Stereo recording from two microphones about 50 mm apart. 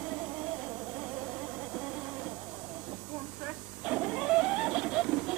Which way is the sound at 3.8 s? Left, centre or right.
Centre.